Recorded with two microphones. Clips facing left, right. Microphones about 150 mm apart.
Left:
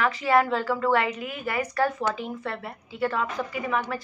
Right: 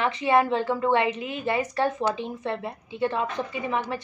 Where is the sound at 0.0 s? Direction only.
25° right (ahead or behind).